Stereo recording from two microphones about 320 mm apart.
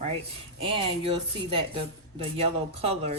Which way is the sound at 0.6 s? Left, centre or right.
Centre.